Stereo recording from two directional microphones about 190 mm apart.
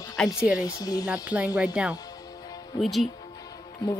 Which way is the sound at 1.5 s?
5° right (ahead or behind).